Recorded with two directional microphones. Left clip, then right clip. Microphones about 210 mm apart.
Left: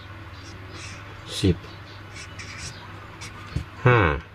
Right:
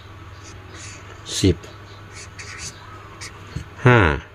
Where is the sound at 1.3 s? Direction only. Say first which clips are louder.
Right 5 dB; 40° right (ahead or behind).